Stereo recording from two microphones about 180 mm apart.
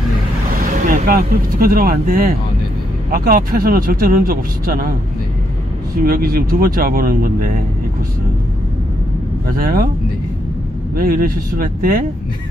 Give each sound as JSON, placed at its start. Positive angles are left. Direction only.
{"t": 0.8, "sound": "speech", "side_deg": -50}
{"t": 6.0, "sound": "speech", "side_deg": -55}
{"t": 9.5, "sound": "speech", "side_deg": -55}
{"t": 11.0, "sound": "speech", "side_deg": -55}